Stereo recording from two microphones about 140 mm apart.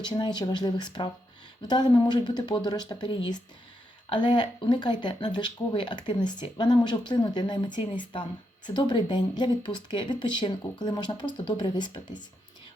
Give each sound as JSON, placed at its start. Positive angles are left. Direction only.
{"t": 0.0, "sound": "speech", "side_deg": 30}